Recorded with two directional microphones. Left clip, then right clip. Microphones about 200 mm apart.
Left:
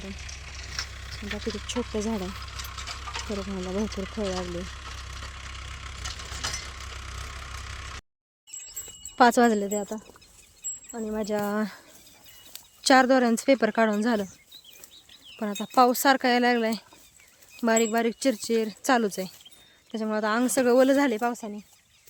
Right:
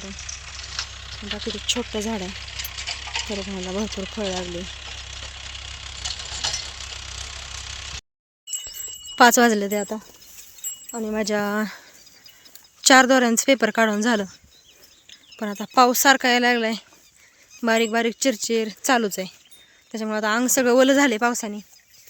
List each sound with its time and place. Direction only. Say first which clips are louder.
0.0 s a sound: right 5 dB; 65° left (ahead or behind)
9.1 s speech: right 4 dB; 10° right (ahead or behind)
9.6 s speech: right 5 dB; 25° right (ahead or behind)
12.8 s speech: right 5 dB; 10° right (ahead or behind)
15.4 s speech: right 4 dB; 5° right (ahead or behind); by 21.5 s 25° right (ahead or behind)